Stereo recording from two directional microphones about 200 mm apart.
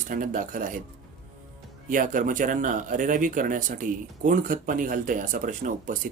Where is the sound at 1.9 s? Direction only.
40° right (ahead or behind).